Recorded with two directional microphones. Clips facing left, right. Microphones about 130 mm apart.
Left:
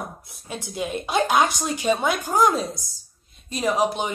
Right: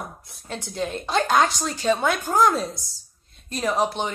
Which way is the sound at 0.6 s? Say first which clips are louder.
Even; 10° left (ahead or behind).